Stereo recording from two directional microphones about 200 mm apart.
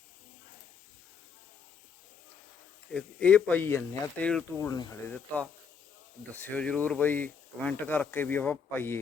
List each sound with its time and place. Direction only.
2.9 s speech: 5° left (ahead or behind)
4.7 s speech: 15° left (ahead or behind)
5.1 s speech: 5° left (ahead or behind)